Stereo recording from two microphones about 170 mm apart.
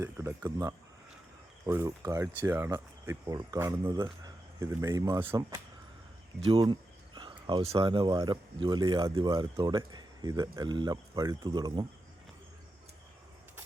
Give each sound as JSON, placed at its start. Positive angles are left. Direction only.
{"t": 0.0, "sound": "speech", "side_deg": -15}
{"t": 6.4, "sound": "speech", "side_deg": -30}